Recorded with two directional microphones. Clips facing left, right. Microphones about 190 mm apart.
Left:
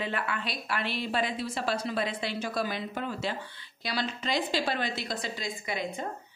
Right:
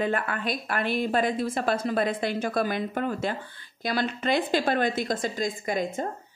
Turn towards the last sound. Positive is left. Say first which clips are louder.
# right 7 dB
turn(degrees=-45)  # may be behind; listen again after turning